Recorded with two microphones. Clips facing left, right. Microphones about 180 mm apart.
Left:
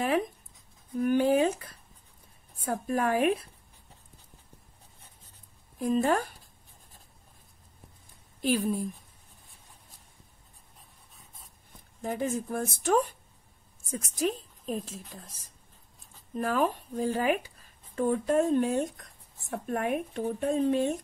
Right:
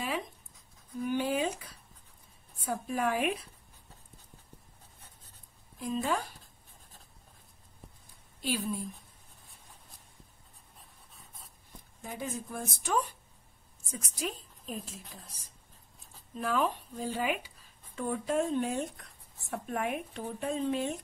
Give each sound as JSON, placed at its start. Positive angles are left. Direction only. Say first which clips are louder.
{"t": 1.0, "sound": "speech", "louder": "left 7 dB", "side_deg": 50}
{"t": 5.8, "sound": "speech", "louder": "left 6 dB", "side_deg": 50}
{"t": 8.4, "sound": "speech", "louder": "left 6 dB", "side_deg": 50}
{"t": 12.0, "sound": "a woman's voice", "louder": "left 8 dB", "side_deg": 45}
{"t": 16.3, "sound": "speech", "louder": "left 3 dB", "side_deg": 45}